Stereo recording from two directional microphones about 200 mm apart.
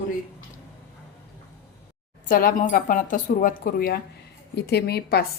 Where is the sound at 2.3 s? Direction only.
45° left (ahead or behind).